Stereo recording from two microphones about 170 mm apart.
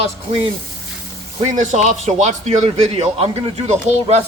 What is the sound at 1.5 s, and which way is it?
A man's voice, 45° right (ahead or behind).